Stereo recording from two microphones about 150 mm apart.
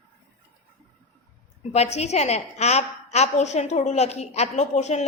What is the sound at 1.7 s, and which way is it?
A woman's voice, 45° left (ahead or behind).